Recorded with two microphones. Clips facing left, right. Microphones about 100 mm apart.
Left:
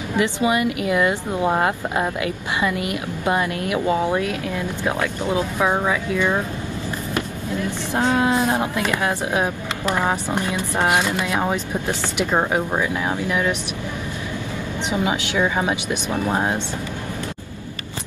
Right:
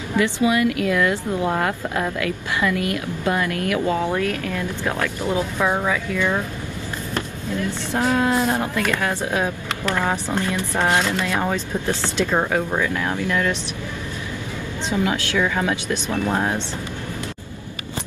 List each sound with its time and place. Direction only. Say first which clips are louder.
0.1 s speech: right 1 dB; 20° left (ahead or behind)
7.9 s speech: left 1 dB; 20° left (ahead or behind)
14.9 s speech: right 1 dB; 20° left (ahead or behind)